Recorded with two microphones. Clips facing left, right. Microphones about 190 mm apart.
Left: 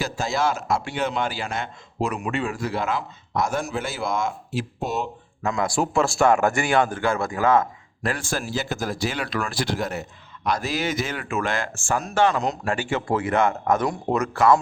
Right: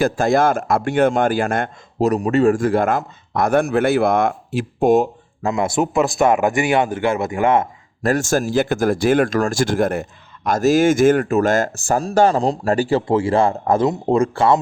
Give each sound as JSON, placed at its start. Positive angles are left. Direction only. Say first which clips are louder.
{"t": 0.0, "sound": "speech", "louder": "right 9 dB", "side_deg": -55}
{"t": 5.4, "sound": "speech", "louder": "right 5 dB", "side_deg": -25}
{"t": 8.0, "sound": "speech", "louder": "right 9 dB", "side_deg": -45}